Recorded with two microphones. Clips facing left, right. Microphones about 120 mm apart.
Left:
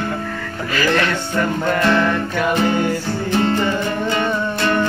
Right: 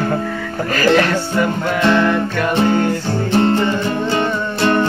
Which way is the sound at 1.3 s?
5° right (ahead or behind).